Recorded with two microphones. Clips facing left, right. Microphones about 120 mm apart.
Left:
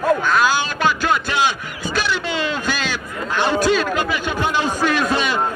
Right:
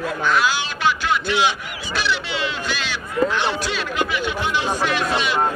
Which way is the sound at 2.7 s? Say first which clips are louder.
Left 3 dB; 45° left (ahead or behind).